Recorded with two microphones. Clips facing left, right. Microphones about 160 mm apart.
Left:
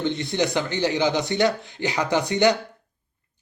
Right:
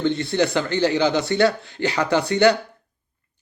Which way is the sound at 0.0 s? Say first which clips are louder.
Right 3 dB; 15° left (ahead or behind).